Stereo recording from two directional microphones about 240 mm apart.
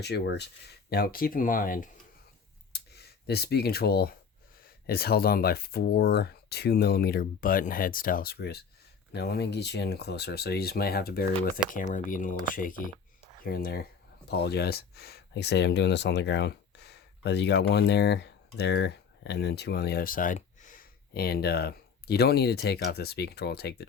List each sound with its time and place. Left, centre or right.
0.0 s speech: left